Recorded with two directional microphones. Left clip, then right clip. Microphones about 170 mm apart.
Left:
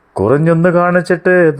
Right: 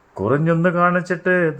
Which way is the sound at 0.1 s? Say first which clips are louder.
Left 7 dB; 35° left (ahead or behind).